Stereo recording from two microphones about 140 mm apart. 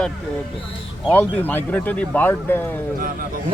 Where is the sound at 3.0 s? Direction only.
90° right.